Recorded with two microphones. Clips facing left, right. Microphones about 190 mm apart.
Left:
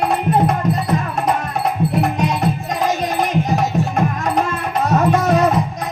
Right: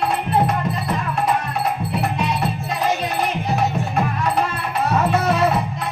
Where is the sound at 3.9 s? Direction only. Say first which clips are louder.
Left 2 dB; 45° left (ahead or behind).